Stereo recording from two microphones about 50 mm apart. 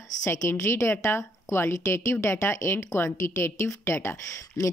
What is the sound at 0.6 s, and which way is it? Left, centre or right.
Speech, left.